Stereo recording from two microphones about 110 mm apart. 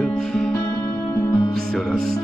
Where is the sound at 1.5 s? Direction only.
5° left (ahead or behind).